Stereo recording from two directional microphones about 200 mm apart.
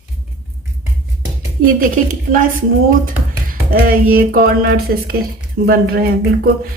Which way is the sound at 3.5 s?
45° right (ahead or behind).